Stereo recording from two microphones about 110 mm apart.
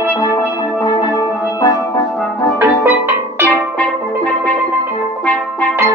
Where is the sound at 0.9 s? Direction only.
30° left (ahead or behind).